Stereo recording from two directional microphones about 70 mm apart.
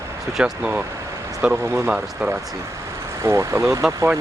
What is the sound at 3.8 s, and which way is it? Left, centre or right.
Speech, centre.